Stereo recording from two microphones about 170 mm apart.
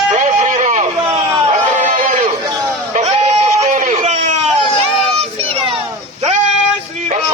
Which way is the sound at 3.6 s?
45° right (ahead or behind).